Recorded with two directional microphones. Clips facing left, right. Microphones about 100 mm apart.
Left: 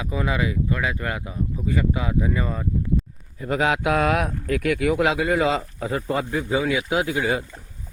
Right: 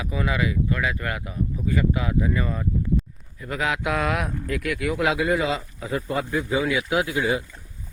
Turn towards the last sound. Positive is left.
turn(degrees=25)  # may be behind; listen again after turning